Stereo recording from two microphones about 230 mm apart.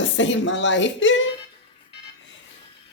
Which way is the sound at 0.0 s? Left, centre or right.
Left.